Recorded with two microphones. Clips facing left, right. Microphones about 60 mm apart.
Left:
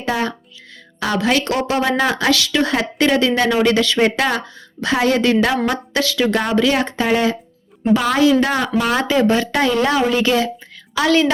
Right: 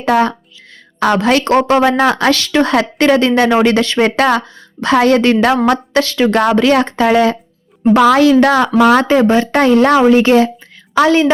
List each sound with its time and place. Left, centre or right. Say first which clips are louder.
0.0 s a woman's voice: right 8 dB; right
7.9 s speech: right 6 dB; right
9.0 s speech: right 5 dB; right